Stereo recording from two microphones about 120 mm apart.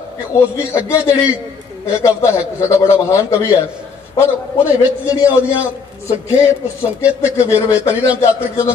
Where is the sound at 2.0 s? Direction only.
25° left (ahead or behind).